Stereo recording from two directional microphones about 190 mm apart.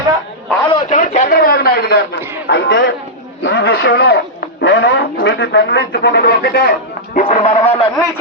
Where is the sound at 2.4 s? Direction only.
65° left (ahead or behind).